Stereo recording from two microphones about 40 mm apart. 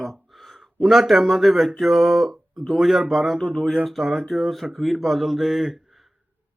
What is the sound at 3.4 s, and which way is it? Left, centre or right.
Speech, centre.